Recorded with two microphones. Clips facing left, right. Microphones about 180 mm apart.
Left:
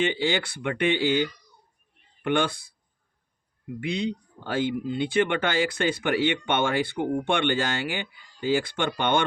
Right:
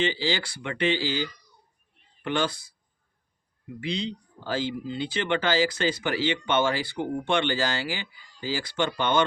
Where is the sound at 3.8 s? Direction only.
50° left (ahead or behind).